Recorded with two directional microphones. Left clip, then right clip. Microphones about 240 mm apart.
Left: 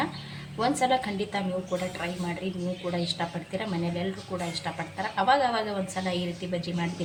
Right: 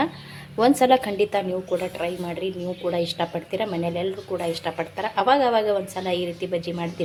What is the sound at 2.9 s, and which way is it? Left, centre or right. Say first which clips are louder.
A woman's voice: right 7 dB; right.